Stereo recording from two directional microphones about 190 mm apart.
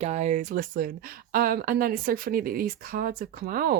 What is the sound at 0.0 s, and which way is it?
Speech, 35° right (ahead or behind).